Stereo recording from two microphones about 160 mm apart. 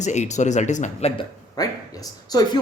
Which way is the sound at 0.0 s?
45° left (ahead or behind).